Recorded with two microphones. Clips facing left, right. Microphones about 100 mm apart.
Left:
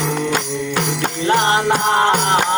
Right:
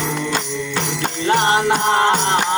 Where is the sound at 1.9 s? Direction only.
15° left (ahead or behind).